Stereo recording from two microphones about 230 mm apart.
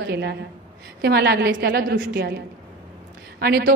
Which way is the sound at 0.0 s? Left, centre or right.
Right.